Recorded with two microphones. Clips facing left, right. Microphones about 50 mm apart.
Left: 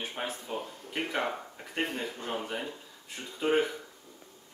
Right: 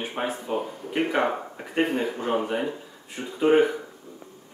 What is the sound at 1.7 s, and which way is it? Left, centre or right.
Speech, centre.